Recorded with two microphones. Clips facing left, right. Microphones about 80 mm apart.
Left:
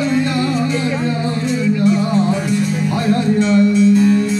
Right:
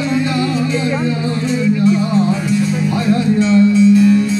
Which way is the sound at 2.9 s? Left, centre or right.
Left.